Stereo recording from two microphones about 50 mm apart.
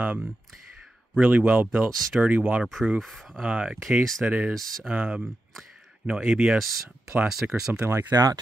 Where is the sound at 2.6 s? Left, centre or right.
Centre.